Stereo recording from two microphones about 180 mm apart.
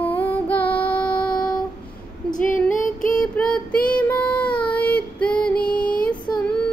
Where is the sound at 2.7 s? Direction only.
45° left (ahead or behind).